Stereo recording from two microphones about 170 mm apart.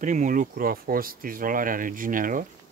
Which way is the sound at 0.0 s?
50° right (ahead or behind).